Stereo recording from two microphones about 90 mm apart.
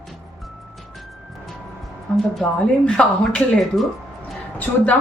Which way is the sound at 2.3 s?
5° left (ahead or behind).